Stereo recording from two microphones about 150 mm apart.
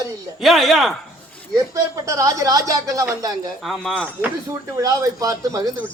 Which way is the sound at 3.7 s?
Centre (ahead or behind).